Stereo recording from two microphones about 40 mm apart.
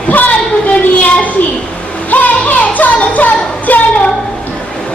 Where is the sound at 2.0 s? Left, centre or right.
Left.